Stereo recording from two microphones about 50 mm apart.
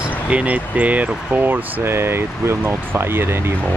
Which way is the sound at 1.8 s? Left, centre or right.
Right.